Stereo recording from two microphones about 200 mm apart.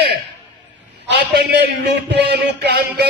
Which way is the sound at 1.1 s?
55° right (ahead or behind).